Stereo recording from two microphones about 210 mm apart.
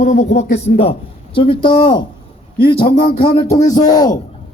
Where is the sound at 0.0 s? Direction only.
35° left (ahead or behind).